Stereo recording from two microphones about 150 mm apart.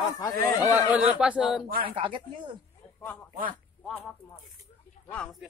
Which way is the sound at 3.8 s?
5° left (ahead or behind).